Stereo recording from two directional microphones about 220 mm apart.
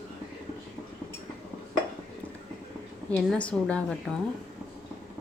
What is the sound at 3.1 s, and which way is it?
Speech, 5° left (ahead or behind).